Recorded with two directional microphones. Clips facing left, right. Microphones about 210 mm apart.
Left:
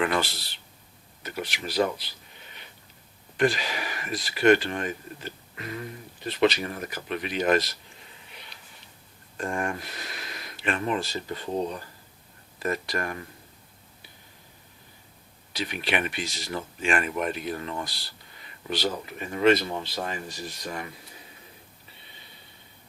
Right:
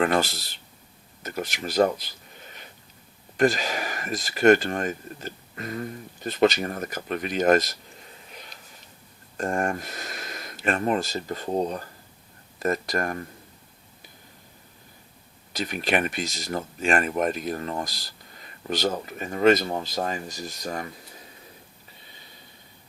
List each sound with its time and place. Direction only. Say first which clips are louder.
0.0 s speech: right 3 dB; 45° right (ahead or behind)
8.3 s a sound: right 4 dB; 45° right (ahead or behind)
9.4 s speech: right 4 dB; 45° right (ahead or behind)
15.5 s speech: right 3 dB; 45° right (ahead or behind)